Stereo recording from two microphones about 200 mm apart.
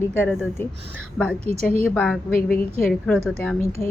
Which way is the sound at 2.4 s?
45° left (ahead or behind).